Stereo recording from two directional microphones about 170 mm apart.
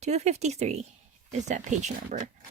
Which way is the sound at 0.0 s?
40° right (ahead or behind).